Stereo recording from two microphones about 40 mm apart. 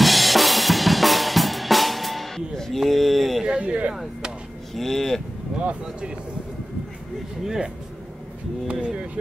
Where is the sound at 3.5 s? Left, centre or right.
Right.